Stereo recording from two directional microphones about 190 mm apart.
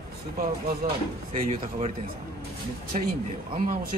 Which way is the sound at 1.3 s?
35° right (ahead or behind).